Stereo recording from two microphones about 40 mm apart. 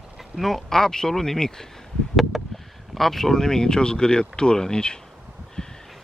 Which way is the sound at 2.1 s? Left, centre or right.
Centre.